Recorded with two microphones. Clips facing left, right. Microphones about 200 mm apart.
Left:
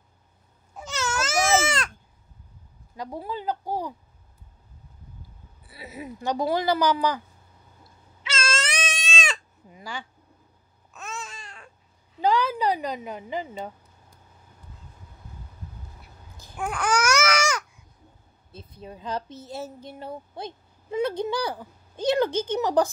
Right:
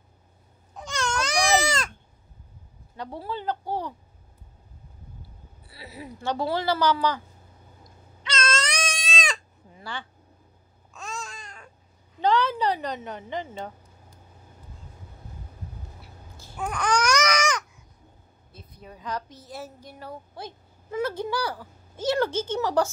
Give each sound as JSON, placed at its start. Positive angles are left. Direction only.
{"t": 0.7, "sound": "crying", "side_deg": 5}
{"t": 3.0, "sound": "speech", "side_deg": 10}
{"t": 5.7, "sound": "speech", "side_deg": 20}
{"t": 7.8, "sound": "cat", "side_deg": 5}
{"t": 9.7, "sound": "a sound", "side_deg": 15}
{"t": 10.9, "sound": "babbling", "side_deg": 5}
{"t": 12.2, "sound": "speech", "side_deg": 10}
{"t": 16.3, "sound": "babbling", "side_deg": 15}
{"t": 18.5, "sound": "speech", "side_deg": 25}